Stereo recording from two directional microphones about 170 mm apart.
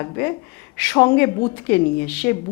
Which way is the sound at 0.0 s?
15° left (ahead or behind).